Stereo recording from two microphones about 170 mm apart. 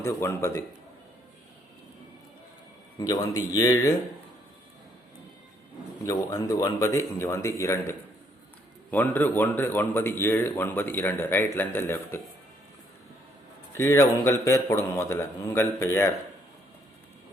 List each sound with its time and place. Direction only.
0.0 s a man's voice: 15° left (ahead or behind)
3.0 s speech: 20° left (ahead or behind)
6.3 s a man's voice: 20° left (ahead or behind)
13.7 s a man's voice: 15° left (ahead or behind)